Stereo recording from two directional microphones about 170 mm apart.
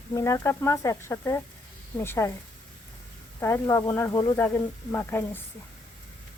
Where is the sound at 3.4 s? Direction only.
15° left (ahead or behind).